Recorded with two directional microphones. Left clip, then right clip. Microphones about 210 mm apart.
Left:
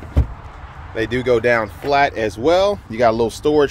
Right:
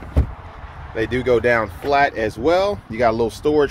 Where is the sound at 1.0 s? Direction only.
10° left (ahead or behind).